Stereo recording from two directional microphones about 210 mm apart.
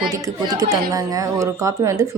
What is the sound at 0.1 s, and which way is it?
A woman's voice, 15° right (ahead or behind).